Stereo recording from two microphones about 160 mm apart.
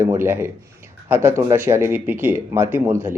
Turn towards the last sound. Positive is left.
turn(degrees=-15)  # may be behind; listen again after turning